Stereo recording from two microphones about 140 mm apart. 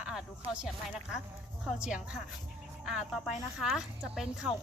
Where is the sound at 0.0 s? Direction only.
5° right (ahead or behind).